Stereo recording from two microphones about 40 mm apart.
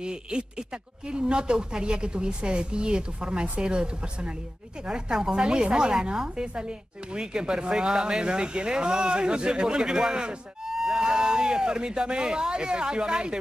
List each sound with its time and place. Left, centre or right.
0.0 s speech: right